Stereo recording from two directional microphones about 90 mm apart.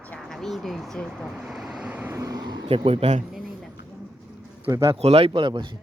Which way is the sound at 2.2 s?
40° right (ahead or behind).